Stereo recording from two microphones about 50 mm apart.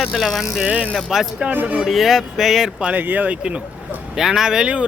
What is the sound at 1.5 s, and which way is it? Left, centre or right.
Speech, right.